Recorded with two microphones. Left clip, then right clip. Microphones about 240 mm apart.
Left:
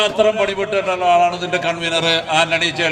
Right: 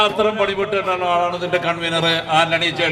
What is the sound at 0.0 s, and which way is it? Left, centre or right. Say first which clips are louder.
A man's voice: left 2 dB; left.